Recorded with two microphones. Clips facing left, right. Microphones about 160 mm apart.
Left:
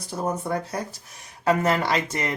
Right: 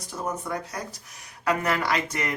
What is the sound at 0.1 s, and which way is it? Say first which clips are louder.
Speech: left 4 dB; 30° left (ahead or behind).